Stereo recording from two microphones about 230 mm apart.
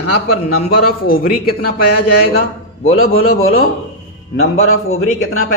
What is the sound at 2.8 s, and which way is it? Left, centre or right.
A man's voice, left.